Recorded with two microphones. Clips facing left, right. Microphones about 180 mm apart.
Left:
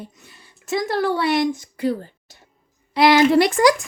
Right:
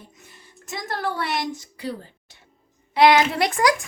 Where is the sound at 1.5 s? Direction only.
50° left (ahead or behind).